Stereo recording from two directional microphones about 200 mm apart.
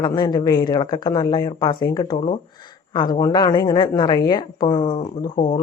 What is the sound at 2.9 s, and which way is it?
Speech, 20° left (ahead or behind).